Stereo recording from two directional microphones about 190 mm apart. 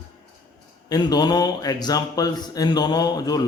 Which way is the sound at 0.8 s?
20° left (ahead or behind).